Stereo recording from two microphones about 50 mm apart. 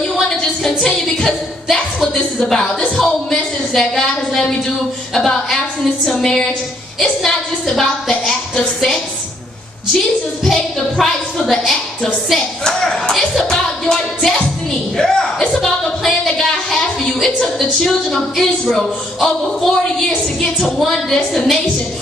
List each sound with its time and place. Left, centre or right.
0.1 s a sound: centre
2.4 s a woman's voice: centre
10.4 s a woman's voice: centre